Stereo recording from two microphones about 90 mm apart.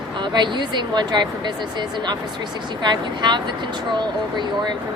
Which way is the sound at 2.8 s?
55° right (ahead or behind).